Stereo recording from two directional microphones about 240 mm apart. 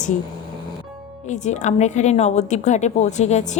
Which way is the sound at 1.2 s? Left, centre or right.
Left.